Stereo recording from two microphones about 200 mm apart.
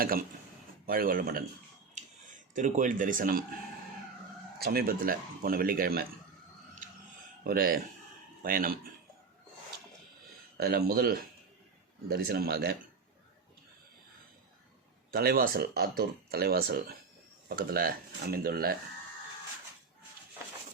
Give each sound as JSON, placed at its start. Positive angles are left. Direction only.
{"t": 0.0, "sound": "speech", "side_deg": -45}
{"t": 2.6, "sound": "speech", "side_deg": -40}
{"t": 4.6, "sound": "speech", "side_deg": -50}
{"t": 7.4, "sound": "speech", "side_deg": -45}
{"t": 10.6, "sound": "speech", "side_deg": -50}
{"t": 15.1, "sound": "speech", "side_deg": -50}